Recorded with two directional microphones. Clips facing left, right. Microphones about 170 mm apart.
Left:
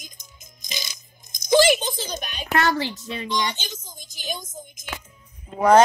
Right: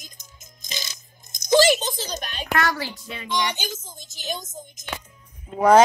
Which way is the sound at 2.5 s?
25° left (ahead or behind).